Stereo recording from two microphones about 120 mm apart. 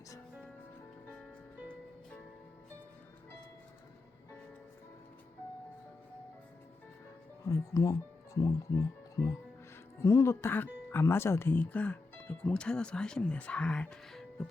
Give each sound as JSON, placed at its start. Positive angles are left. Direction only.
{"t": 7.4, "sound": "speech", "side_deg": 25}